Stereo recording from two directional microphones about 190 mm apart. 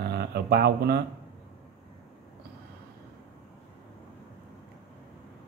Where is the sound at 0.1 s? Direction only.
60° right (ahead or behind).